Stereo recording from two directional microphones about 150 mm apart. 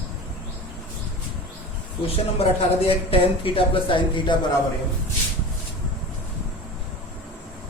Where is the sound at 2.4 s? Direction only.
40° left (ahead or behind).